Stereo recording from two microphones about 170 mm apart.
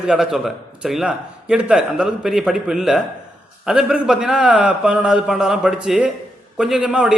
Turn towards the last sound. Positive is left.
turn(degrees=-5)  # may be behind; listen again after turning